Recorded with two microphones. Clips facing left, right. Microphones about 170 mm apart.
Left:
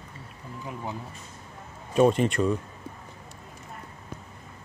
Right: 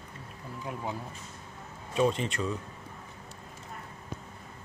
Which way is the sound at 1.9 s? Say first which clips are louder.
Left 7 dB; 55° left (ahead or behind).